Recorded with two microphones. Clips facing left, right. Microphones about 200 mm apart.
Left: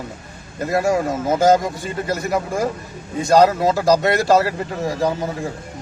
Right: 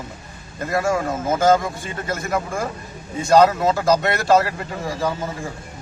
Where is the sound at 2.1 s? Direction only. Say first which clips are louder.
Left 2 dB; 35° left (ahead or behind).